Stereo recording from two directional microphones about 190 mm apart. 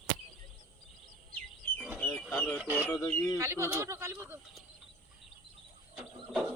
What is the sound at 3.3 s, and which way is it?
Speech, 15° right (ahead or behind).